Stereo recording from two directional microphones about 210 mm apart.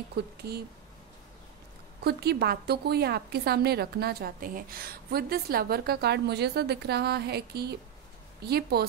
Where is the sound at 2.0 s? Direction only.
50° right (ahead or behind).